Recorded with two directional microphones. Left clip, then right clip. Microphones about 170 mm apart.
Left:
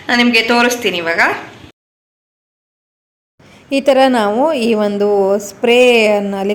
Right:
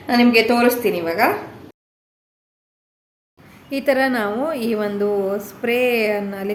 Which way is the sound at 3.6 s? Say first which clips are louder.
Left 8 dB; 40° left (ahead or behind).